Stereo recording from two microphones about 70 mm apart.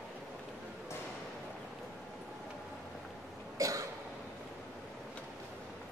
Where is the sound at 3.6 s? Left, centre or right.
Right.